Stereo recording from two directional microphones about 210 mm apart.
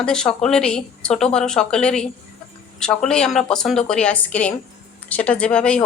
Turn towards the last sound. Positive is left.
turn(degrees=5)  # may be behind; listen again after turning